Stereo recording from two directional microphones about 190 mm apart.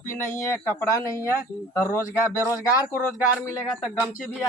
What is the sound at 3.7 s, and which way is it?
Speech, centre (ahead or behind).